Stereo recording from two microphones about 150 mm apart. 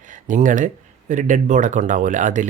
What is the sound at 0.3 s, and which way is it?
Speech, 60° right (ahead or behind).